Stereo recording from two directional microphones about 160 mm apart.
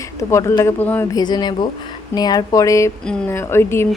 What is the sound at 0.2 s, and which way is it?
Speech, 20° left (ahead or behind).